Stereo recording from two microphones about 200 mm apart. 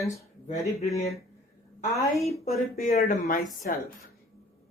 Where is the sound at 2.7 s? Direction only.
50° left (ahead or behind).